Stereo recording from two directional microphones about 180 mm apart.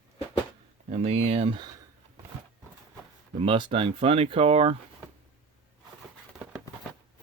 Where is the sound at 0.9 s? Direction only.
35° right (ahead or behind).